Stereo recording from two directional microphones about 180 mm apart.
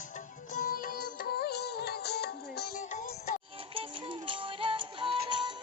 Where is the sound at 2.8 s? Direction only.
45° left (ahead or behind).